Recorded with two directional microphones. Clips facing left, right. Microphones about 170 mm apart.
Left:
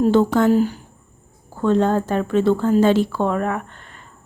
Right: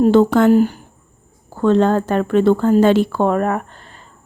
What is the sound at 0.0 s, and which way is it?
Speech, 70° right (ahead or behind).